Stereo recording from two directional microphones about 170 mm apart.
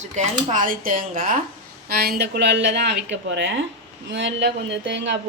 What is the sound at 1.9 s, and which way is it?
Speech, 65° right (ahead or behind).